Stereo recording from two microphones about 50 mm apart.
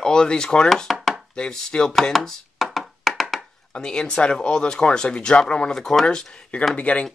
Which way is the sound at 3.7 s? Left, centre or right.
Centre.